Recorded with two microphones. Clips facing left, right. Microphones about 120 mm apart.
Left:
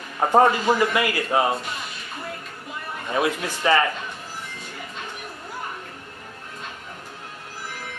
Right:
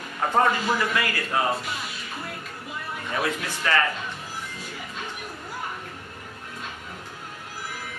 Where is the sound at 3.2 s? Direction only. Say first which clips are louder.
Left 5 dB; 15° left (ahead or behind).